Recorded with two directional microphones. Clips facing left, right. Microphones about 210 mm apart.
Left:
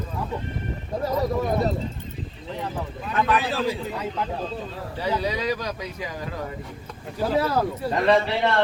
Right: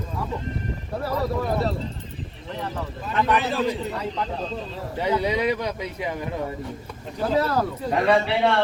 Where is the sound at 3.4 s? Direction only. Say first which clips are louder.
Right 1 dB; centre (ahead or behind).